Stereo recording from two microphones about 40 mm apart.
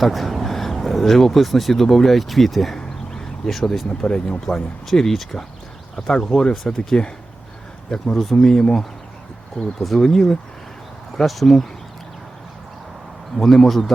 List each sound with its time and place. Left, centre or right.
0.0 s speech: centre
4.0 s speech: centre
4.4 s speech: centre
6.1 s speech: centre
8.2 s speech: centre
9.8 s speech: centre
13.3 s speech: centre